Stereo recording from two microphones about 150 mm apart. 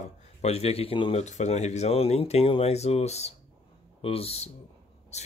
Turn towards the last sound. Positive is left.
turn(degrees=50)  # may be behind; listen again after turning